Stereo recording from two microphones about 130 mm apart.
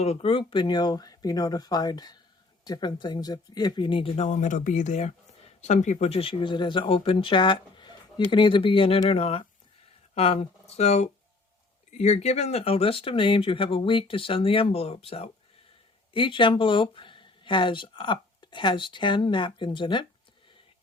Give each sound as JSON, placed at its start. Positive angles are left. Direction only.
{"t": 0.0, "sound": "speech", "side_deg": 50}
{"t": 4.3, "sound": "speech", "side_deg": 70}